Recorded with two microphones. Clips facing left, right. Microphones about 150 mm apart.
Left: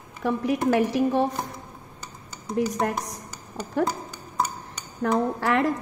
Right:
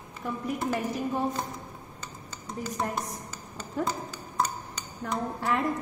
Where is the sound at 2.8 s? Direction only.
65° left (ahead or behind).